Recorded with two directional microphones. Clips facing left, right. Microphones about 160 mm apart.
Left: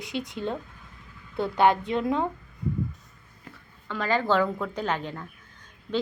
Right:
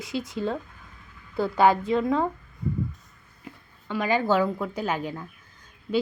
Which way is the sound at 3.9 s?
15° right (ahead or behind).